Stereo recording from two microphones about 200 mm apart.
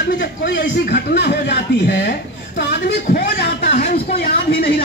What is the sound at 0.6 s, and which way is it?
Speech, 55° left (ahead or behind).